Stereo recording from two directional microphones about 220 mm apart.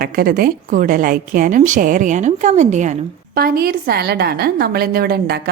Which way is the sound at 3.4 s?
45° right (ahead or behind).